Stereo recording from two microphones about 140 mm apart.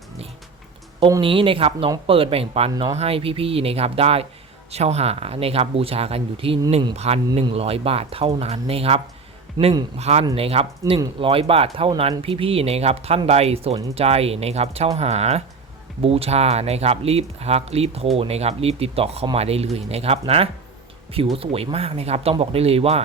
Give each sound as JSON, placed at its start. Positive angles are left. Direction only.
{"t": 1.2, "sound": "speech", "side_deg": -40}
{"t": 10.0, "sound": "speech", "side_deg": -50}